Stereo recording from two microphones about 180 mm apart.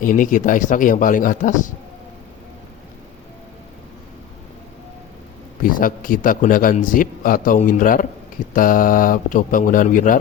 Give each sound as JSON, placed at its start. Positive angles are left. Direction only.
{"t": 0.0, "sound": "speech", "side_deg": 45}
{"t": 5.7, "sound": "speech", "side_deg": 50}